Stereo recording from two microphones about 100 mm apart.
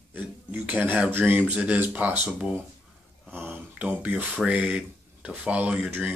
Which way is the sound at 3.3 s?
20° right (ahead or behind).